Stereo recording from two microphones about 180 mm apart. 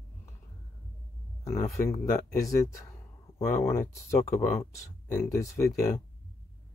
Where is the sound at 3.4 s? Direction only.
10° left (ahead or behind).